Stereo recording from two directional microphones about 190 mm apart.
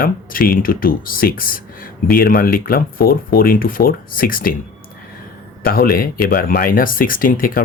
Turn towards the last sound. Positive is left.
turn(degrees=45)  # may be behind; listen again after turning